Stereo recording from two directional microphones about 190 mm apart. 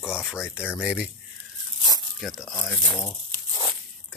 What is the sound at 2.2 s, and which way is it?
Speech, centre (ahead or behind).